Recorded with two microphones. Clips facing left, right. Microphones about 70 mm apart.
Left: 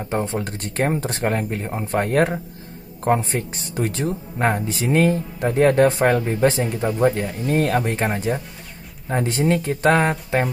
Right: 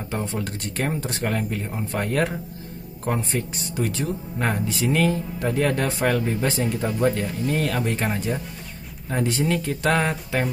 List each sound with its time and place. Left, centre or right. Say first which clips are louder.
0.1 s speech: left 4 dB; left
6.8 s speech: left 5 dB; left
7.4 s speech: left 5 dB; left
9.8 s speech: left 5 dB; left